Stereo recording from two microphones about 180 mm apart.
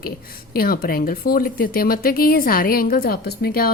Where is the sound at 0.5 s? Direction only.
55° left (ahead or behind).